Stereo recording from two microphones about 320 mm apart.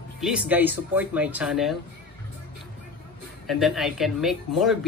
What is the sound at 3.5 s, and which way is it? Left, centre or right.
Speech, centre.